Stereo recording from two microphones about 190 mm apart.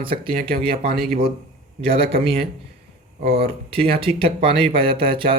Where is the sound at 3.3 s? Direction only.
30° right (ahead or behind).